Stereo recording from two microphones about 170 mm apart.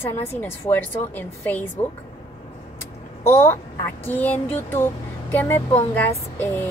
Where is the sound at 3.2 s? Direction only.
15° left (ahead or behind).